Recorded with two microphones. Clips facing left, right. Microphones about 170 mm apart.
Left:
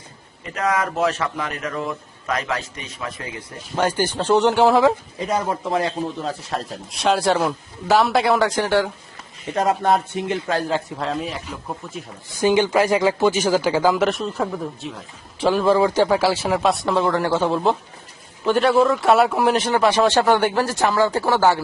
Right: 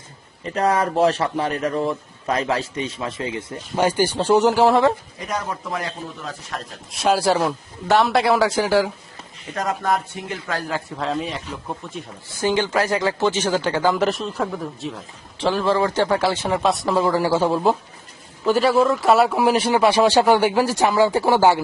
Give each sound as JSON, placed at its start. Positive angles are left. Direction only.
{"t": 0.4, "sound": "speech", "side_deg": -35}
{"t": 3.8, "sound": "a man's voice", "side_deg": -10}
{"t": 5.2, "sound": "speech", "side_deg": 30}
{"t": 6.9, "sound": "speech", "side_deg": 0}
{"t": 9.6, "sound": "speech", "side_deg": 25}
{"t": 10.9, "sound": "speech", "side_deg": 0}
{"t": 12.4, "sound": "speech", "side_deg": 15}
{"t": 15.4, "sound": "a man's voice", "side_deg": 10}